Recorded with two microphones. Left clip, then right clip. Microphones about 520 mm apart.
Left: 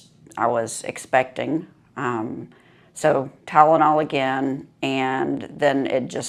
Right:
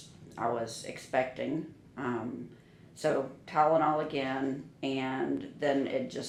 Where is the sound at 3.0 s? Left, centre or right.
Left.